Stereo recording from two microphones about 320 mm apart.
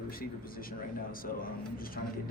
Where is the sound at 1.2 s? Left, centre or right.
Left.